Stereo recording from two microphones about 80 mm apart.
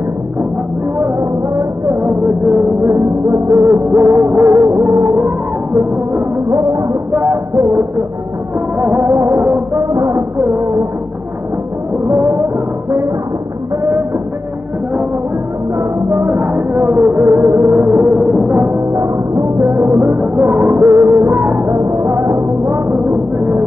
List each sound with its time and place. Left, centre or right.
0.9 s music: right
8.8 s music: right
12.1 s music: right
15.8 s music: right
18.0 s music: centre
18.6 s music: right